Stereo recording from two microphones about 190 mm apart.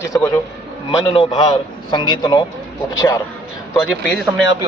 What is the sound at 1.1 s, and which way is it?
Speech, 25° left (ahead or behind).